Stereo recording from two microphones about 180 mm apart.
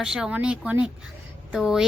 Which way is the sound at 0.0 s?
5° right (ahead or behind).